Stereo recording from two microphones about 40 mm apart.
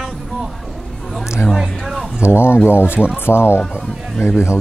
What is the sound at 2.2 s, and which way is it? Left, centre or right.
Speech, left.